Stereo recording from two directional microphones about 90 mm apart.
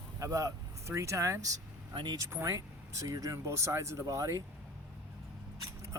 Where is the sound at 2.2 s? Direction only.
30° right (ahead or behind).